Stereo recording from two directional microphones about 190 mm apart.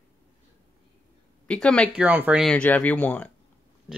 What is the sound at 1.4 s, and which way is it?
Speech, 5° left (ahead or behind).